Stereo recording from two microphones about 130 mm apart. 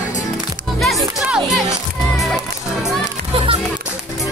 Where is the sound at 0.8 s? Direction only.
Centre (ahead or behind).